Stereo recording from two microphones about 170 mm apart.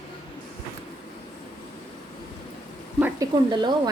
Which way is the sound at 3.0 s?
15° right (ahead or behind).